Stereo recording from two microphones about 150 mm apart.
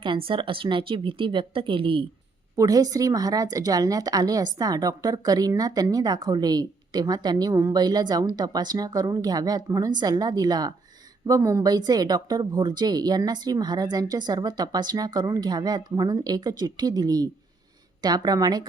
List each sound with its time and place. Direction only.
0.0 s speech: 35° right (ahead or behind)
2.6 s a woman's voice: 25° right (ahead or behind)